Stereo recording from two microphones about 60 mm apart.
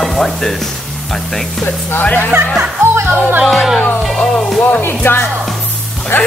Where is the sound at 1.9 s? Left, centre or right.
Left.